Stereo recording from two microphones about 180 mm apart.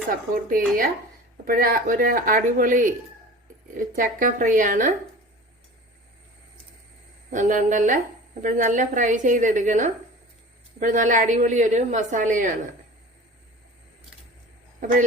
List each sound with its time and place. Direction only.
0.4 s speech: 50° right (ahead or behind)
7.3 s speech: 45° right (ahead or behind)